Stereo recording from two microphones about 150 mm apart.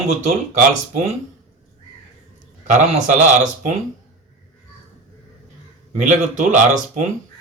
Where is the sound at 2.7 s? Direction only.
55° right (ahead or behind).